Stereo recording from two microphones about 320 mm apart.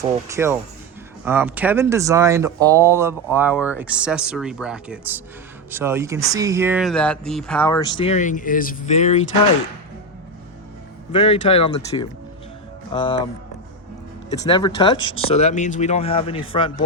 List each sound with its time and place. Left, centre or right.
0.0 s speech: centre; by 9.2 s left
11.1 s speech: centre
14.4 s speech: centre